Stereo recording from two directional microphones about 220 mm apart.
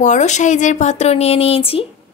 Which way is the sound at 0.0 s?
35° left (ahead or behind).